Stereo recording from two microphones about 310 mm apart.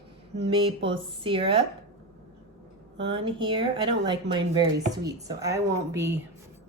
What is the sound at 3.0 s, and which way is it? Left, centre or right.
Speech, centre.